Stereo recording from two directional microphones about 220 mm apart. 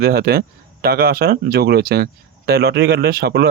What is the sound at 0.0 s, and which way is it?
Speech, 45° right (ahead or behind).